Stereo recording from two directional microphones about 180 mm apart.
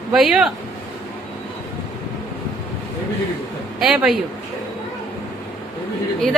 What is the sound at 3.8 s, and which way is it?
Speech, 5° right (ahead or behind).